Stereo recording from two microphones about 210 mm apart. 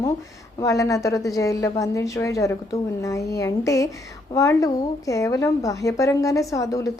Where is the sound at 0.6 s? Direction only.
15° left (ahead or behind).